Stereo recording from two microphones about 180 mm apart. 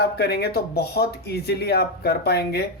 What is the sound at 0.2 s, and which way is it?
Speech, 60° left (ahead or behind).